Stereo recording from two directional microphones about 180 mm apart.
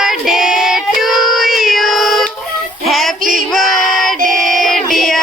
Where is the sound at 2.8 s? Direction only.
Centre (ahead or behind).